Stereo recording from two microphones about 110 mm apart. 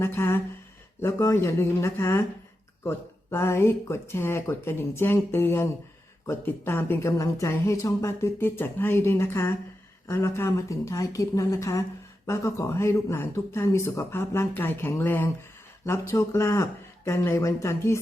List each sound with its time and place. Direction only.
0.0 s speech: 20° left (ahead or behind)